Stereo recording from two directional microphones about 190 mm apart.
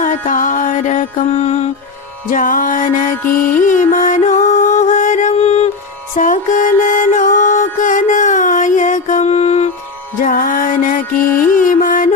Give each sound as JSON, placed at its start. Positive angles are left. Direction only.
{"t": 0.0, "sound": "mantra", "side_deg": 45}
{"t": 2.2, "sound": "music", "side_deg": 45}
{"t": 6.1, "sound": "mantra", "side_deg": 40}
{"t": 10.2, "sound": "music", "side_deg": 45}